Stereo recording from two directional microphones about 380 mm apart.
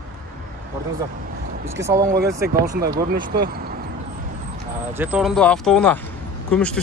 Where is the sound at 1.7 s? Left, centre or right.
Centre.